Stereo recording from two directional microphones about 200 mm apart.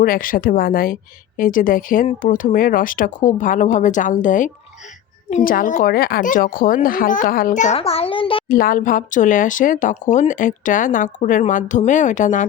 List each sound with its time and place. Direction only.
0.0 s a woman's voice: 45° left (ahead or behind); by 8.4 s 25° left (ahead or behind)
8.4 s speech: 45° left (ahead or behind)